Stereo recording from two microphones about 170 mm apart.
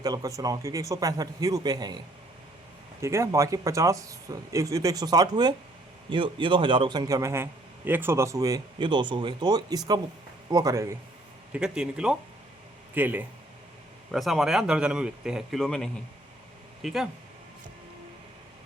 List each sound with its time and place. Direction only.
0.0 s speech: 20° right (ahead or behind)
3.0 s speech: 15° right (ahead or behind)
11.5 s speech: 5° right (ahead or behind)